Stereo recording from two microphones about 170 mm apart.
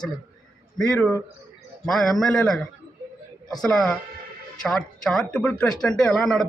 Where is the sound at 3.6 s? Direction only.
5° left (ahead or behind).